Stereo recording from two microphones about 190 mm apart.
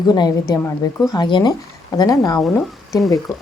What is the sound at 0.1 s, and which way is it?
Speech, 20° left (ahead or behind).